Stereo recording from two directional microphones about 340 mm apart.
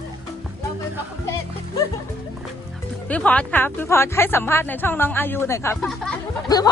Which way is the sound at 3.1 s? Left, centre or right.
Centre.